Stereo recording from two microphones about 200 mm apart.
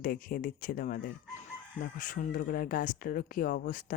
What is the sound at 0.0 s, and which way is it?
Speech, 45° left (ahead or behind).